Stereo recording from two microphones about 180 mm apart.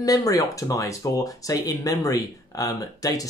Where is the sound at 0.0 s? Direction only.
20° left (ahead or behind).